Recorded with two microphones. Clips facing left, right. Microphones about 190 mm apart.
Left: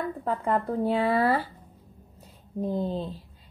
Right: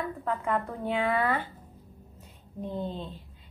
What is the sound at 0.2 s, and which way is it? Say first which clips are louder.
A woman's voice: left 3 dB; 35° left (ahead or behind).